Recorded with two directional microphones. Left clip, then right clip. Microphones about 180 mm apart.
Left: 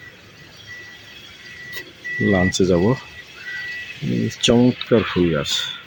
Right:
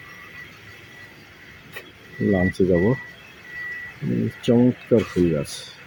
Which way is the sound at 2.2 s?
15° left (ahead or behind).